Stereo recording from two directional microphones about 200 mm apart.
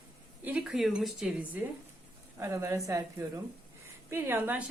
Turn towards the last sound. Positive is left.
turn(degrees=-10)  # may be behind; listen again after turning